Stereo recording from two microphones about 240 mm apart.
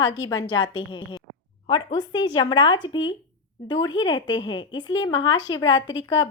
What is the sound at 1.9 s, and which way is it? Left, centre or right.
A woman's voice, centre.